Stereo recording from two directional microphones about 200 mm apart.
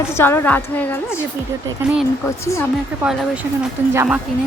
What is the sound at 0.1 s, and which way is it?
A woman's voice, 10° left (ahead or behind).